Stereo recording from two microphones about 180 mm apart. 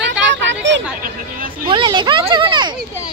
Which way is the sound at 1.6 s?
25° right (ahead or behind).